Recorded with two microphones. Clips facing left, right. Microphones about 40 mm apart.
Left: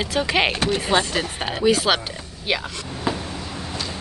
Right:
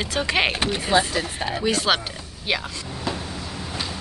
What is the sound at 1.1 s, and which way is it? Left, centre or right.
Speech, left.